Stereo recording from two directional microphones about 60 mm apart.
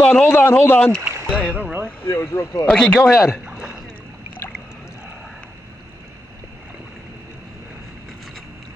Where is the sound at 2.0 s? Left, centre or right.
Left.